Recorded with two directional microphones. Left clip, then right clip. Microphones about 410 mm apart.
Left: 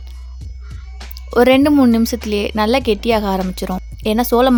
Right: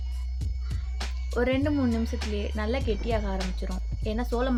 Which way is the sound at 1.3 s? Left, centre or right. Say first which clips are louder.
Left 15 dB; left.